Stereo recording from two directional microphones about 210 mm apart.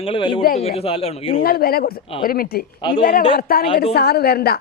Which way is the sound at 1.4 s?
45° left (ahead or behind).